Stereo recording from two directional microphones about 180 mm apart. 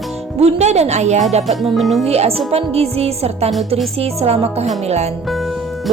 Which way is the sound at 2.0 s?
35° right (ahead or behind).